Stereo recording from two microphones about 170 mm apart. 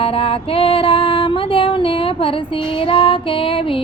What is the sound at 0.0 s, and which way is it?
Female singing, 35° left (ahead or behind).